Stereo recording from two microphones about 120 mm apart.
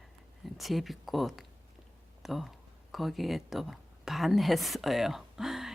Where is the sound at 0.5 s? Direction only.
Centre (ahead or behind).